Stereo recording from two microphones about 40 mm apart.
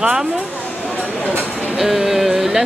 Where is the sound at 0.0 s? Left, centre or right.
Centre.